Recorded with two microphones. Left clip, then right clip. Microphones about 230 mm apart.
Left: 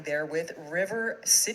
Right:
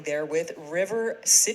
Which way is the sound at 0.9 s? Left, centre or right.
Right.